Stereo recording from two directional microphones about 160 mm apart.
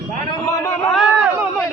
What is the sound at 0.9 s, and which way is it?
Speech, centre (ahead or behind).